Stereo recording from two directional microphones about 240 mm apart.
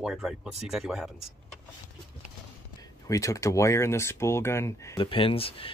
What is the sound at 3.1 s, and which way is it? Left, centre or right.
Speech, centre.